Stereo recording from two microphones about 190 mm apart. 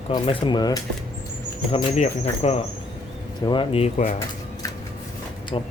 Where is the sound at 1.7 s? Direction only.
35° left (ahead or behind).